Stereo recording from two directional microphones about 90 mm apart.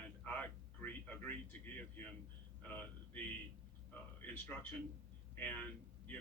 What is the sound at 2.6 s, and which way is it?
Speech, 15° left (ahead or behind).